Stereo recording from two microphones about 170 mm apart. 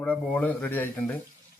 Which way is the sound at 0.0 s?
10° left (ahead or behind).